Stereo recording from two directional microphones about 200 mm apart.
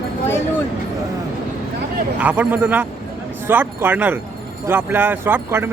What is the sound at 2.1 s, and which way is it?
Speech, 5° right (ahead or behind).